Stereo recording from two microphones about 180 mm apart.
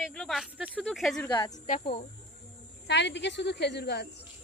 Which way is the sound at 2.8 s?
75° left (ahead or behind).